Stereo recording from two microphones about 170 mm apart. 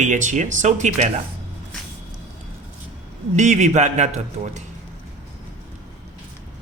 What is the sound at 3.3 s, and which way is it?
Speech, 45° right (ahead or behind).